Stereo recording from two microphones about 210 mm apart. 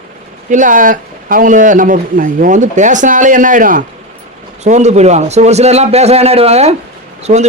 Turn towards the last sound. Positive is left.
turn(degrees=-35)  # may be behind; listen again after turning